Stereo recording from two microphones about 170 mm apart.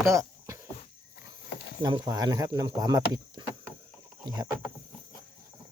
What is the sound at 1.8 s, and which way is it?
Speech, 25° right (ahead or behind).